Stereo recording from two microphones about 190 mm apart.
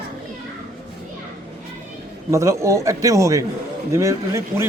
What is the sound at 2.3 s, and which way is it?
A man's voice, 15° right (ahead or behind).